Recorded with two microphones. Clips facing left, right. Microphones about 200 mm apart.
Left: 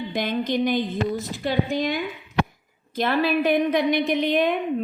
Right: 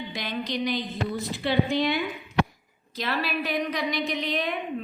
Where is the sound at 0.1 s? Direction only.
50° left (ahead or behind).